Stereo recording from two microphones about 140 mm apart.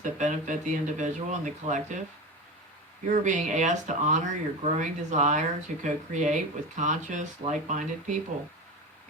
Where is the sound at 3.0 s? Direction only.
60° right (ahead or behind).